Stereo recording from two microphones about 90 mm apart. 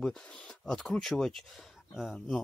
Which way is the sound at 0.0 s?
10° left (ahead or behind).